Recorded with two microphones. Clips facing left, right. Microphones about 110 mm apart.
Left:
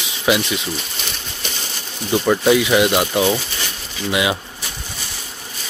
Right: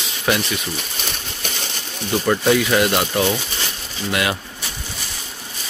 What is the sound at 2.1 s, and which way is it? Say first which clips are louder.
Speech: left 2 dB; 10° left (ahead or behind).